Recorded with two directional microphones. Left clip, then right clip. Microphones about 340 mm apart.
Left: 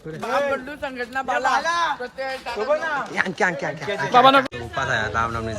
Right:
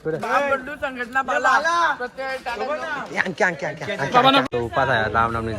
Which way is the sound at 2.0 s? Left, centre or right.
Right.